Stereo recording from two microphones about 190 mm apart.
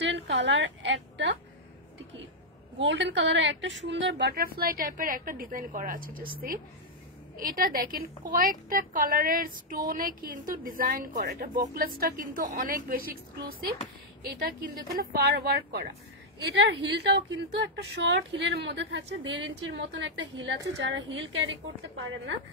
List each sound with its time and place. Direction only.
0.1 s a sound: 75° right (ahead or behind)
2.8 s a woman's voice: 75° right (ahead or behind); by 6.3 s 50° right (ahead or behind)
7.3 s a woman's voice: 50° right (ahead or behind)
14.2 s speech: 55° right (ahead or behind)
16.3 s a woman's voice: 65° right (ahead or behind)